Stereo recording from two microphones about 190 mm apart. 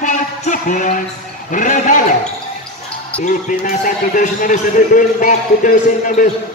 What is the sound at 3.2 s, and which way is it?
A man's voice, 40° left (ahead or behind).